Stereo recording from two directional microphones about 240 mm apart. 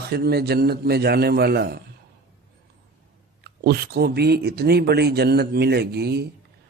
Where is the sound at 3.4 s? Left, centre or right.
Right.